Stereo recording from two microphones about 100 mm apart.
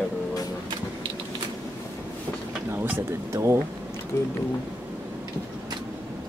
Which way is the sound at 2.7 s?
20° right (ahead or behind).